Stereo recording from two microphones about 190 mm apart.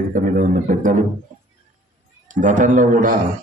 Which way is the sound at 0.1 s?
45° right (ahead or behind).